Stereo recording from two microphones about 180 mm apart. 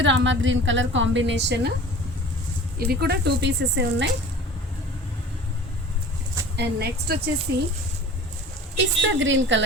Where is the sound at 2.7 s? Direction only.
60° right (ahead or behind).